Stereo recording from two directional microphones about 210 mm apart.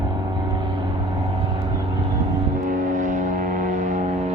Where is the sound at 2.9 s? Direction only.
35° right (ahead or behind).